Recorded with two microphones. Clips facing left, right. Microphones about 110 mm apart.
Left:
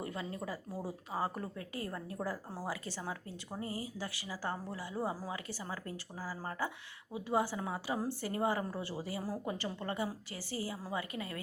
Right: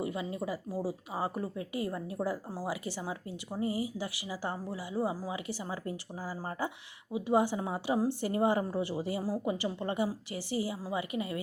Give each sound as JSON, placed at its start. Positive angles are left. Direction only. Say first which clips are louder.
{"t": 0.0, "sound": "a woman's voice", "louder": "right 5 dB", "side_deg": -10}